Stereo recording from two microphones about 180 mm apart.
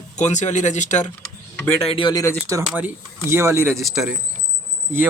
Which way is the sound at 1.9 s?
25° left (ahead or behind).